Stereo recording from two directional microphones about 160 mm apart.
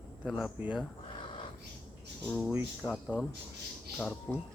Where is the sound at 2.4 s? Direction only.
5° right (ahead or behind).